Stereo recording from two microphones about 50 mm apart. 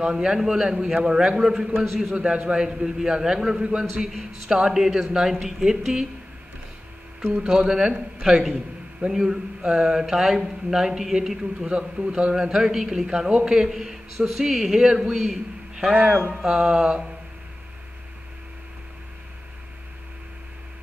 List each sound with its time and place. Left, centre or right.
0.0 s a man's voice: centre
2.1 s speech: centre
7.4 s a man's voice: centre